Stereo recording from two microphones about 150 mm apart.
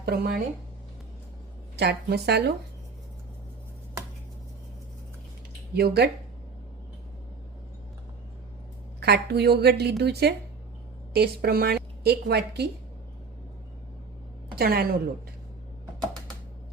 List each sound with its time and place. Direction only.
0.0 s a woman's voice: 90° right
1.7 s a woman's voice: 90° right
5.7 s a woman's voice: 90° right
9.0 s a woman's voice: 90° right
14.5 s a woman's voice: 90° right